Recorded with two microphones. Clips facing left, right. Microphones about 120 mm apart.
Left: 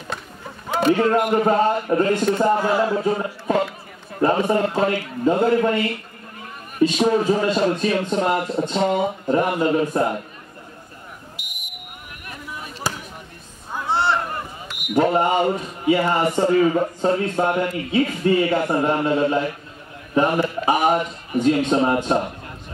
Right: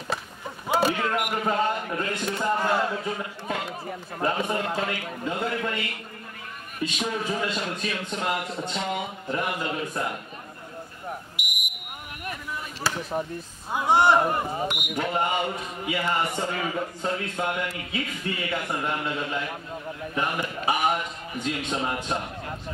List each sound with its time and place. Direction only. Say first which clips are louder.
0.7 s a sound: left 5 dB; 5° right (ahead or behind)
0.9 s a man's voice: left 9 dB; 35° left (ahead or behind)
2.6 s a sound: left 5 dB; centre (ahead or behind)
2.9 s a man's voice: left 9 dB; 35° left (ahead or behind)
11.3 s smoke detector: right 4 dB; 15° right (ahead or behind)
12.9 s chop: left 1 dB; 15° left (ahead or behind)
13.7 s a man's voice: right 2 dB; 15° right (ahead or behind)
15.0 s a man's voice: left 9 dB; 40° left (ahead or behind)